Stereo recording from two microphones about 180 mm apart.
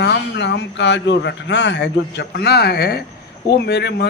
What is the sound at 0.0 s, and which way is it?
A man's voice, 70° left (ahead or behind).